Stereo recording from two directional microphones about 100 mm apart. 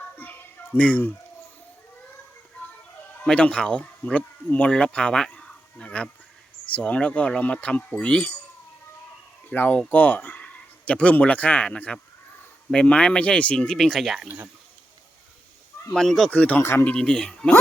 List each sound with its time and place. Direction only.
0.2 s a sound: 15° left (ahead or behind)
3.2 s speech: 10° left (ahead or behind)
9.5 s speech: 15° left (ahead or behind); by 14.3 s centre (ahead or behind)
14.3 s speech: 15° right (ahead or behind)
15.9 s speech: 5° left (ahead or behind)
16.3 s speech: 15° left (ahead or behind)
16.9 s speech: 5° left (ahead or behind)